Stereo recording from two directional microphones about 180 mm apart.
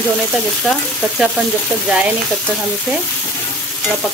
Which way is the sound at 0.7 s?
Centre (ahead or behind).